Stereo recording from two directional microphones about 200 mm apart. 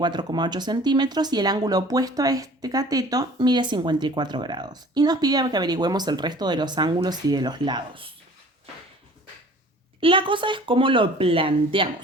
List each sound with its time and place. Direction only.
0.0 s speech: 20° right (ahead or behind)
10.0 s speech: 25° right (ahead or behind)